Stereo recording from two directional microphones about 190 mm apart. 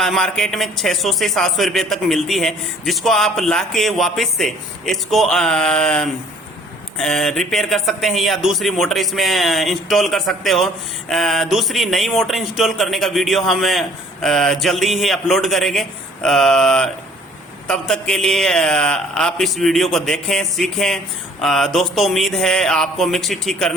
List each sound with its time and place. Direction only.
0.0 s a man's voice: centre (ahead or behind)